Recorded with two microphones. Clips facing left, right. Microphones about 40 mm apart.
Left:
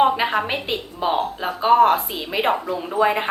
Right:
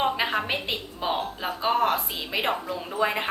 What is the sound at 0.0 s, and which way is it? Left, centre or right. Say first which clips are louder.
A woman's voice: left 7 dB; centre.